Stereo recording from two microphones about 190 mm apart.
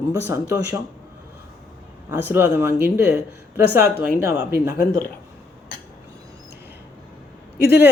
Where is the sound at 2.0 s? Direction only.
10° right (ahead or behind).